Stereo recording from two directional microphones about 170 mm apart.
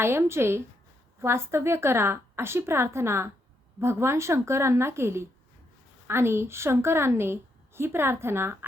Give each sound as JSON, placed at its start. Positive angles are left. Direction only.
{"t": 0.0, "sound": "a woman's voice", "side_deg": -15}